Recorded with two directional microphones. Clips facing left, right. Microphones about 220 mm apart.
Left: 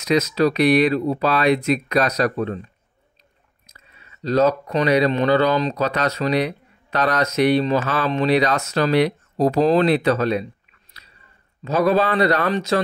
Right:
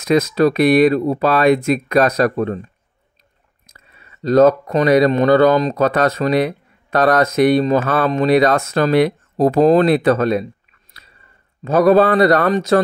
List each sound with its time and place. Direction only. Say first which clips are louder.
0.0 s speech: right 4 dB; 50° right (ahead or behind)
3.7 s speech: right 3 dB; 50° right (ahead or behind)